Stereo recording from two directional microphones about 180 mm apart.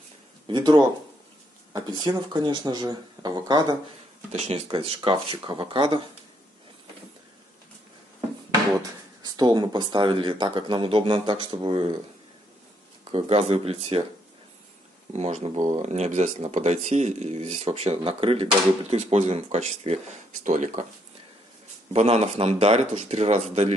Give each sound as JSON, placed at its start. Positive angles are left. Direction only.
{"t": 0.5, "sound": "speech", "side_deg": -25}
{"t": 4.3, "sound": "speech", "side_deg": -35}
{"t": 8.7, "sound": "speech", "side_deg": -20}
{"t": 13.0, "sound": "speech", "side_deg": -35}
{"t": 15.1, "sound": "speech", "side_deg": -35}
{"t": 21.9, "sound": "speech", "side_deg": -35}